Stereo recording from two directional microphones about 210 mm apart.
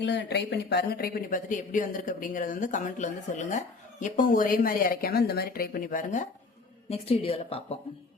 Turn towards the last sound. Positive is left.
turn(degrees=25)  # may be behind; listen again after turning